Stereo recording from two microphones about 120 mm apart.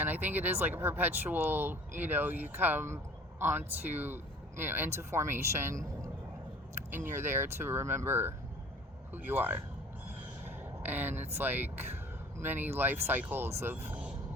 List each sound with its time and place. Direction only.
0.0 s speech: 15° right (ahead or behind)